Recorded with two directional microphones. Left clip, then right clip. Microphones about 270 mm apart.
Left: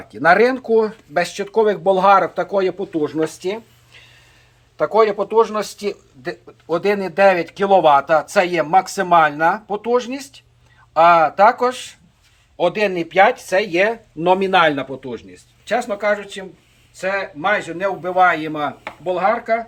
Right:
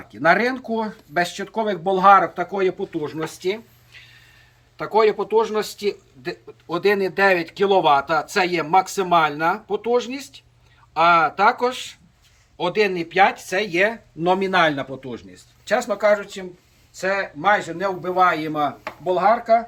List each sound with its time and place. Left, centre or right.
0.1 s a man's voice: centre